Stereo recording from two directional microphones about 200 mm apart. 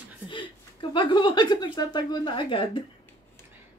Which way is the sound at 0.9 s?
25° left (ahead or behind).